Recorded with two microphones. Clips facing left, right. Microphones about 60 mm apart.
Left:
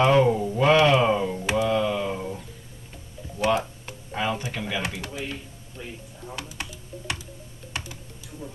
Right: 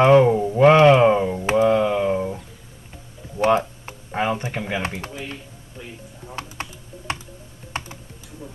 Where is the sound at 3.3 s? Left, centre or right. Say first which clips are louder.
Right 5 dB; right.